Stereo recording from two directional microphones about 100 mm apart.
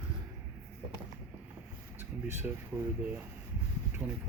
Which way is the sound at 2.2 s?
25° right (ahead or behind).